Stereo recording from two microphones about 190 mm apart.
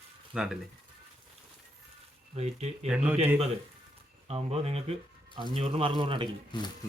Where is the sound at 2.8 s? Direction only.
5° right (ahead or behind).